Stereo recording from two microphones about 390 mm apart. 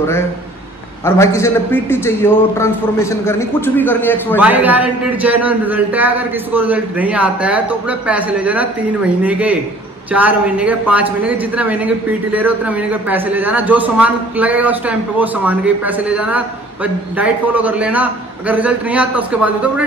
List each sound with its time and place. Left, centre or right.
1.0 s a man's voice: centre